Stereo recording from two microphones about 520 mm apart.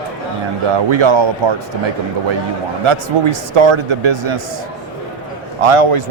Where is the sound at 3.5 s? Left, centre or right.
Right.